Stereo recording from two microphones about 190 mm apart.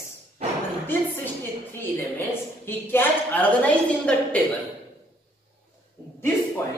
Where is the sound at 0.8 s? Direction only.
10° left (ahead or behind).